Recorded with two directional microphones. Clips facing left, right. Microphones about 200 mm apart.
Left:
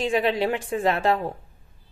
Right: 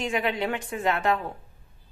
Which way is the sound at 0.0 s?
30° left (ahead or behind).